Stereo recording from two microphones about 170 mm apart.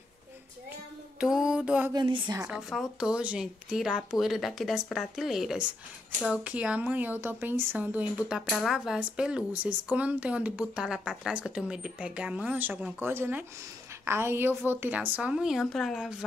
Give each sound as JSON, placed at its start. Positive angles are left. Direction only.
{"t": 1.2, "sound": "music", "side_deg": -5}
{"t": 2.0, "sound": "a woman's voice", "side_deg": -25}
{"t": 2.4, "sound": "speech", "side_deg": -5}